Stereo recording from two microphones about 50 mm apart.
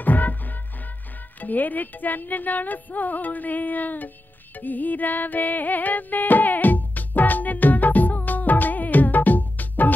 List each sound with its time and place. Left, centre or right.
0.0 s music: left